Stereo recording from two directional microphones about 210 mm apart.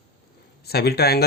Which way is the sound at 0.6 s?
50° left (ahead or behind).